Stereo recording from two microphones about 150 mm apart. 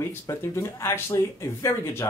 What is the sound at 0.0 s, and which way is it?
Speech, 15° left (ahead or behind).